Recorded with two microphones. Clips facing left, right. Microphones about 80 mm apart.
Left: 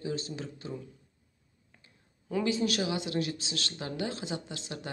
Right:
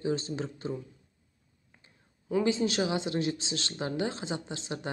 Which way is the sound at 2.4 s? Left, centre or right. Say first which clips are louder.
Right 1 dB; right.